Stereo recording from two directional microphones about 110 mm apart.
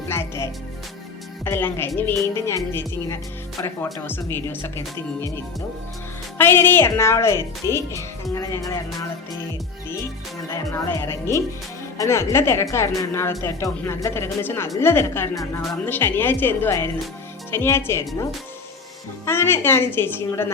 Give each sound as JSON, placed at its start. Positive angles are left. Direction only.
{"t": 0.1, "sound": "music", "side_deg": 25}
{"t": 1.5, "sound": "speech", "side_deg": 20}
{"t": 4.0, "sound": "speech", "side_deg": 20}
{"t": 6.3, "sound": "speech", "side_deg": 20}
{"t": 10.5, "sound": "speech", "side_deg": 30}
{"t": 19.2, "sound": "speech", "side_deg": 20}